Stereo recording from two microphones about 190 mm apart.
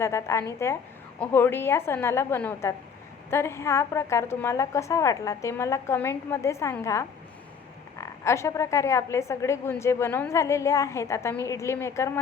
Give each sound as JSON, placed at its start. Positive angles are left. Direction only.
{"t": 0.0, "sound": "a woman's voice", "side_deg": 15}
{"t": 8.0, "sound": "a woman's voice", "side_deg": 15}